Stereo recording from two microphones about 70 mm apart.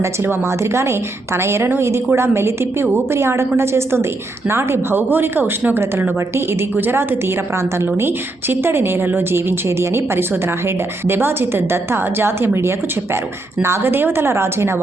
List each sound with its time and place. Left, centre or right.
0.0 s a woman's voice: right